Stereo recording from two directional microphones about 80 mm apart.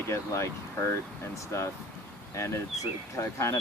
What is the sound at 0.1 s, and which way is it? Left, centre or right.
Speech, left.